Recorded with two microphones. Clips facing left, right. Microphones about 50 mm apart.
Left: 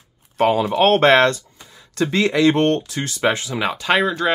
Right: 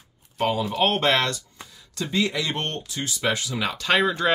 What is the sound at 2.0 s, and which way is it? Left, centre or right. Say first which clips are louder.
Speech: left 9 dB; left.